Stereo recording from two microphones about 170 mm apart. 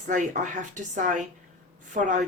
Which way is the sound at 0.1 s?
50° right (ahead or behind).